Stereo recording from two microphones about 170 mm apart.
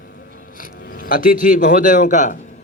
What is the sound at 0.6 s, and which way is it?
Speech, 55° left (ahead or behind).